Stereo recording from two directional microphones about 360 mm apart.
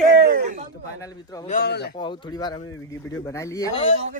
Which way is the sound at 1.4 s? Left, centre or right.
Left.